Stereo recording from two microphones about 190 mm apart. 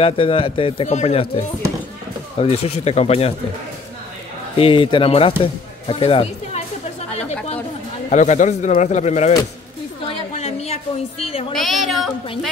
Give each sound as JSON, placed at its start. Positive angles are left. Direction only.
{"t": 0.0, "sound": "speech", "side_deg": 30}
{"t": 4.6, "sound": "speech", "side_deg": 30}
{"t": 5.4, "sound": "music", "side_deg": 30}
{"t": 8.1, "sound": "speech", "side_deg": 40}
{"t": 10.0, "sound": "a sound", "side_deg": 35}
{"t": 11.5, "sound": "a sound", "side_deg": 0}